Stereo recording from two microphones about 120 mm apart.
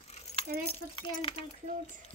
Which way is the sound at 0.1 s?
60° left (ahead or behind).